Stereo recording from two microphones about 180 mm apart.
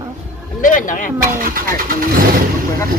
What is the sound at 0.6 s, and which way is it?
Speech, 45° left (ahead or behind).